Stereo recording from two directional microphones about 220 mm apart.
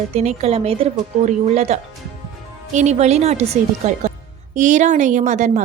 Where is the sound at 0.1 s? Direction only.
30° right (ahead or behind).